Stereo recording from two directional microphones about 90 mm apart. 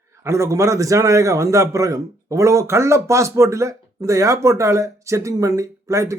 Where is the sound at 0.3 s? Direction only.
35° right (ahead or behind).